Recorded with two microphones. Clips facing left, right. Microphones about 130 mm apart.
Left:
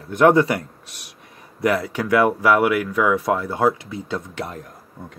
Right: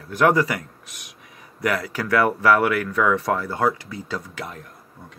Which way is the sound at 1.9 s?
20° left (ahead or behind).